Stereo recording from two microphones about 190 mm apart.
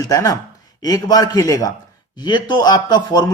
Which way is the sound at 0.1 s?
20° left (ahead or behind).